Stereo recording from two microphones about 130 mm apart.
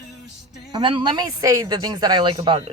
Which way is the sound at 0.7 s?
40° right (ahead or behind).